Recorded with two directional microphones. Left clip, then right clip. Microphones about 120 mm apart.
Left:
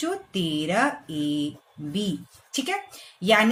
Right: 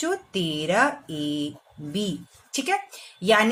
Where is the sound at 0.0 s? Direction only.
45° right (ahead or behind).